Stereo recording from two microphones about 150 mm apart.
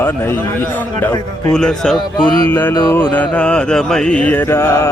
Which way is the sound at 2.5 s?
15° left (ahead or behind).